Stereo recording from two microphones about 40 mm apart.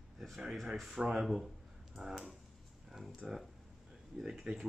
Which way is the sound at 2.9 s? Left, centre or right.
Centre.